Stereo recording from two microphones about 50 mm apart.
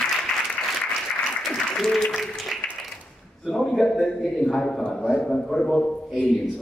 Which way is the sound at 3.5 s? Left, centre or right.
Centre.